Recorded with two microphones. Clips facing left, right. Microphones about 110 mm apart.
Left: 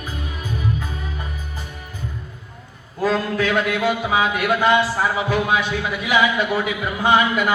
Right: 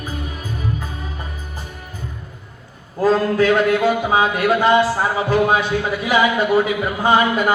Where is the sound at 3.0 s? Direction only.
35° right (ahead or behind).